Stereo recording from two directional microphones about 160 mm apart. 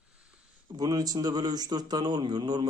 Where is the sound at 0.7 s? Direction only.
25° right (ahead or behind).